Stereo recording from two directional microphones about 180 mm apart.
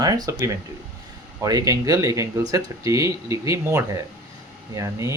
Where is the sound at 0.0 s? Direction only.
20° right (ahead or behind).